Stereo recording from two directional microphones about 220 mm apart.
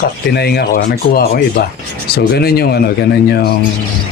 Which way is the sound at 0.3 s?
45° left (ahead or behind).